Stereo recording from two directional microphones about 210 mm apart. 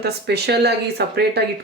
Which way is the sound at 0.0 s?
50° right (ahead or behind).